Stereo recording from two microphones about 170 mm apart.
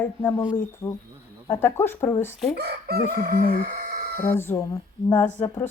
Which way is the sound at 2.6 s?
70° right (ahead or behind).